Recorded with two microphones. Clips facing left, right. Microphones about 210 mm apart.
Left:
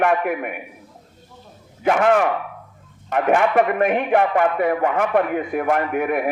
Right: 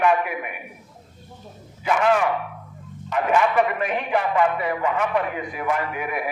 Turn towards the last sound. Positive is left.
turn(degrees=55)  # may be behind; listen again after turning